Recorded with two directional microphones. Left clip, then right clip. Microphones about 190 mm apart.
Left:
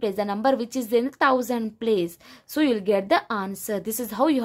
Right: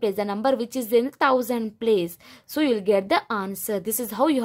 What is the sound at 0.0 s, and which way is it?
Speech, 5° right (ahead or behind).